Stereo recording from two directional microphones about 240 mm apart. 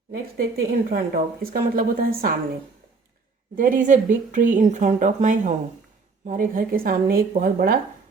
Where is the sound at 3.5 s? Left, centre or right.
Right.